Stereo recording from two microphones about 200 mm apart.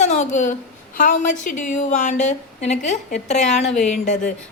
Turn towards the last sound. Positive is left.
turn(degrees=35)  # may be behind; listen again after turning